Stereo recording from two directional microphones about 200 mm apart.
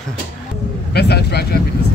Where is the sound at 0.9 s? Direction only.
55° left (ahead or behind).